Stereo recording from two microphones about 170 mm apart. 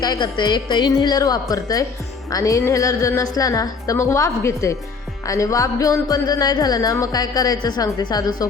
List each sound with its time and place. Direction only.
0.0 s speech: 25° left (ahead or behind)